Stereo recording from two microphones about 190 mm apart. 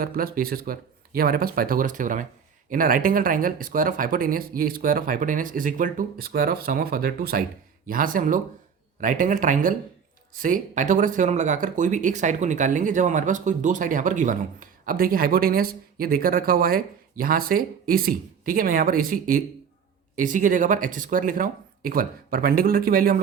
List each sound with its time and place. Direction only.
0.0 s speech: 50° right (ahead or behind)